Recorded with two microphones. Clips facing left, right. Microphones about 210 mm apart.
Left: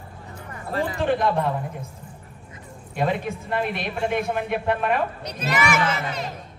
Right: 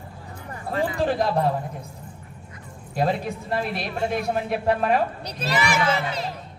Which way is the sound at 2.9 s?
35° right (ahead or behind).